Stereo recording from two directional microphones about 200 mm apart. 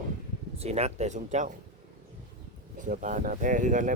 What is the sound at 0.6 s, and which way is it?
Speech, 30° right (ahead or behind).